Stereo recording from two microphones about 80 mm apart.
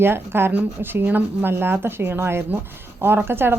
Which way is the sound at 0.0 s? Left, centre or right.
Right.